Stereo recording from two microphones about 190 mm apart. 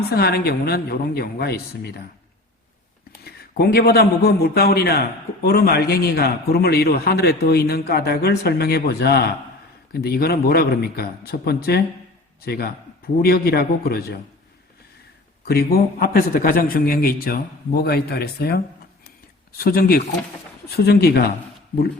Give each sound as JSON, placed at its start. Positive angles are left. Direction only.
{"t": 0.1, "sound": "a man's voice", "side_deg": 55}
{"t": 3.2, "sound": "a man's voice", "side_deg": 55}
{"t": 15.4, "sound": "a man's voice", "side_deg": 55}